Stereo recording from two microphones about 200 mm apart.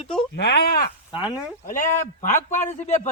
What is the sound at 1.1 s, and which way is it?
Speech, 5° right (ahead or behind).